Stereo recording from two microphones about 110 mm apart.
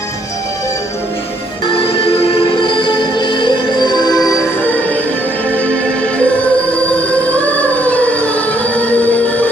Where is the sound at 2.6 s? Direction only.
45° left (ahead or behind).